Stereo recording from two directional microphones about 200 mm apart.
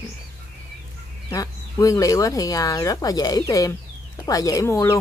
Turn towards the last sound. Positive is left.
turn(degrees=15)  # may be behind; listen again after turning